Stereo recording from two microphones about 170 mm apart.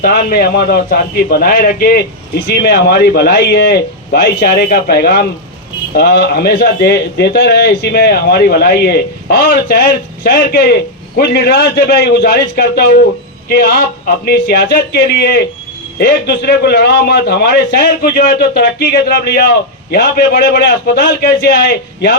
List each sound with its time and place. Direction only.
0.0 s a man's voice: 65° left (ahead or behind)
2.5 s a man's voice: 70° left (ahead or behind)